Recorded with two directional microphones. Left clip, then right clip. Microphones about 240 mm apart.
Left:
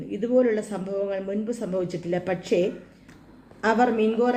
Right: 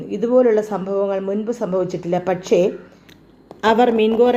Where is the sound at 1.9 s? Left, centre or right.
Centre.